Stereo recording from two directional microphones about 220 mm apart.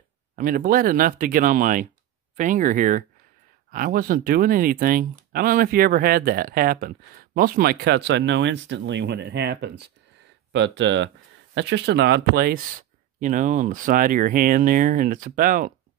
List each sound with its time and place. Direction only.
0.4 s speech: 40° right (ahead or behind)